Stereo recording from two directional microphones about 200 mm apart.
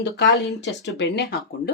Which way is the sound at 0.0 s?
60° left (ahead or behind).